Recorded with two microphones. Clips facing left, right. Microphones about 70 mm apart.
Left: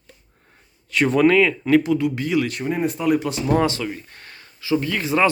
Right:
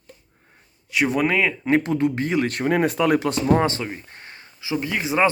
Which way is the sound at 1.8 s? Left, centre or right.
Right.